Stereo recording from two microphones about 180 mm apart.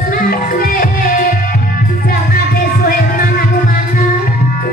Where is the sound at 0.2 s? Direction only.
55° left (ahead or behind).